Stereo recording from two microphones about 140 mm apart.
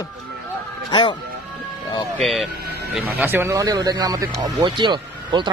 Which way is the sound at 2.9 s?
15° right (ahead or behind).